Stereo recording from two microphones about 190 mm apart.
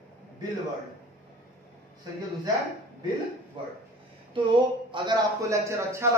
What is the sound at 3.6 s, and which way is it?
A man's voice, 25° right (ahead or behind).